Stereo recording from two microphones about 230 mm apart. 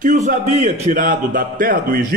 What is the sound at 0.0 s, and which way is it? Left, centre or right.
A man's voice, right.